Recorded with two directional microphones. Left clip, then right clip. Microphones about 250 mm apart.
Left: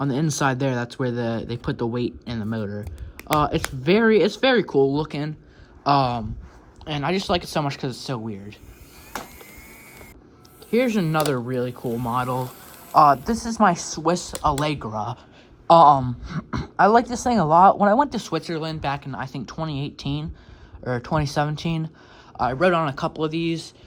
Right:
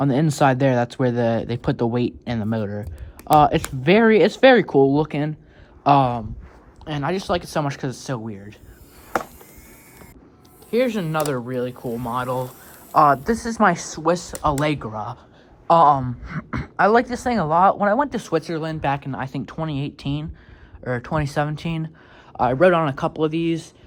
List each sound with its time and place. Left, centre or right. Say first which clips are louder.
0.0 s speech: right 5 dB; centre
10.7 s speech: even; left
12.9 s speech: even; left